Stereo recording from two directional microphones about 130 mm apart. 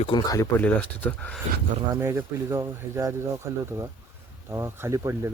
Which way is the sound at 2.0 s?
20° right (ahead or behind).